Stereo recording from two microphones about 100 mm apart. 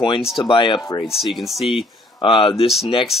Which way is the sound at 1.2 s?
Centre (ahead or behind).